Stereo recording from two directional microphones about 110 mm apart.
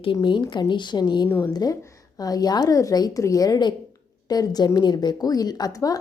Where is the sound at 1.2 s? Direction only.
20° left (ahead or behind).